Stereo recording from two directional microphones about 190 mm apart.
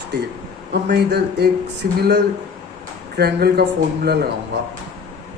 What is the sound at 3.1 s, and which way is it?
A man's voice, 55° right (ahead or behind).